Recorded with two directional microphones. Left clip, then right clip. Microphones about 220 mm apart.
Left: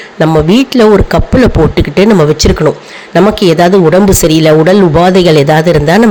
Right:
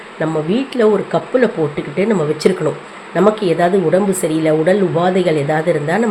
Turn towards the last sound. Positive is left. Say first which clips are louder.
# left 9 dB
turn(degrees=50)  # may be behind; listen again after turning